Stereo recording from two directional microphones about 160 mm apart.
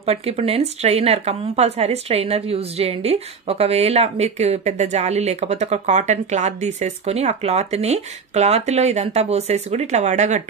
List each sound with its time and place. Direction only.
0.0 s speech: 40° right (ahead or behind)